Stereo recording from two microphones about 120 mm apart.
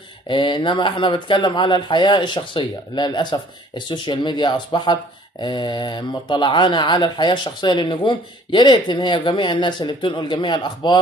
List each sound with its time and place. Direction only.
0.3 s speech: 45° left (ahead or behind)